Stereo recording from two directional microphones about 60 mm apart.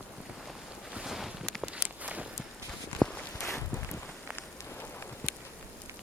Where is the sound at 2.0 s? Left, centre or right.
Right.